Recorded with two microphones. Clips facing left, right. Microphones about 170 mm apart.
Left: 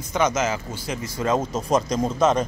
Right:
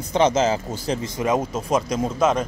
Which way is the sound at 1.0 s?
15° right (ahead or behind).